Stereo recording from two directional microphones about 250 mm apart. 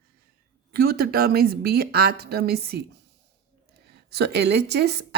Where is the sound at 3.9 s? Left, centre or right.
Right.